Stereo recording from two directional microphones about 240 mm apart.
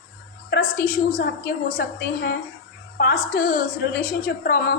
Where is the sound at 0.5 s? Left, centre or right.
Left.